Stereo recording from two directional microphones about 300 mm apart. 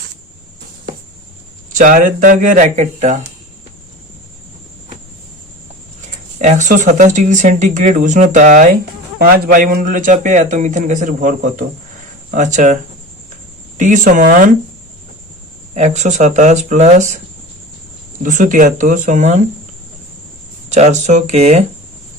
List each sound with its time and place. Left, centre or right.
1.8 s speech: right
6.4 s speech: right
15.7 s speech: right
18.2 s speech: right
20.7 s speech: right